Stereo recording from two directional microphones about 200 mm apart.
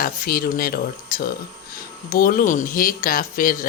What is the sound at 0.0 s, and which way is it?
Speech, 45° left (ahead or behind).